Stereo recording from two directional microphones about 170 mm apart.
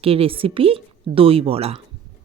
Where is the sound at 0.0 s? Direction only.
35° right (ahead or behind).